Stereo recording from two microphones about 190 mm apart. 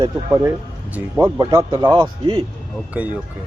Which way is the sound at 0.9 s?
10° right (ahead or behind).